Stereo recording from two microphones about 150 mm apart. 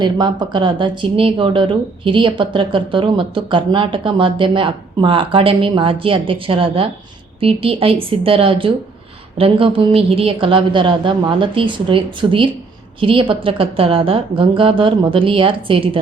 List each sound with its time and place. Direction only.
0.0 s speech: 30° right (ahead or behind)